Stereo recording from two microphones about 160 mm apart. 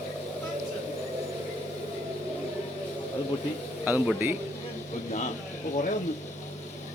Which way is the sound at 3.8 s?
10° right (ahead or behind).